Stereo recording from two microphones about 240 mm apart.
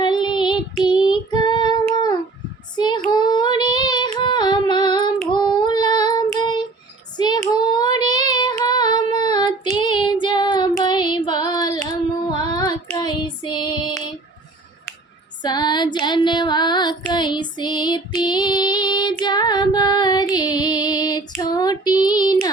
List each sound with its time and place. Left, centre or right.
0.0 s child singing: centre
1.9 s a sound: centre
2.7 s child singing: centre
3.1 s female singing: centre
5.3 s child singing: centre
15.4 s female singing: centre